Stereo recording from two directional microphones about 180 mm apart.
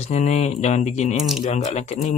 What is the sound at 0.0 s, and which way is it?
Speech, 40° left (ahead or behind).